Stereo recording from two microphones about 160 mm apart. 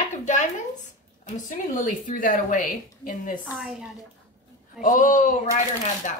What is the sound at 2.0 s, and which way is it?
Speech, 55° left (ahead or behind).